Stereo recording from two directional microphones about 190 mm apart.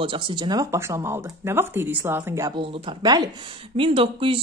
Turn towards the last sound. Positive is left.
turn(degrees=-30)  # may be behind; listen again after turning